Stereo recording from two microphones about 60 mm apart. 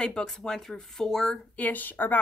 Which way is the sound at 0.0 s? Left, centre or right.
Centre.